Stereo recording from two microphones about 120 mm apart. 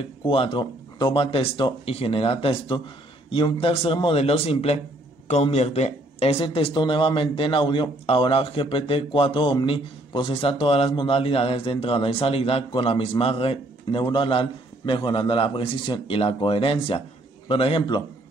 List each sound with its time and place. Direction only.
0.3 s a man's voice: 45° left (ahead or behind)